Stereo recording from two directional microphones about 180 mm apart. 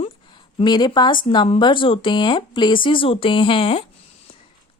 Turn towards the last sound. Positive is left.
turn(degrees=30)  # may be behind; listen again after turning